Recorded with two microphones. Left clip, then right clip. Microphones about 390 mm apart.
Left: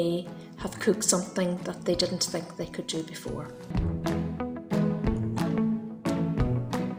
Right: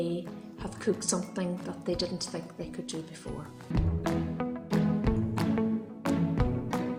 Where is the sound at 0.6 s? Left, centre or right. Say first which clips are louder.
Left 5 dB; right.